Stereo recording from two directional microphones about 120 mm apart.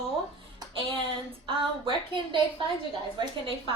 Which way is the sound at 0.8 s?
45° right (ahead or behind).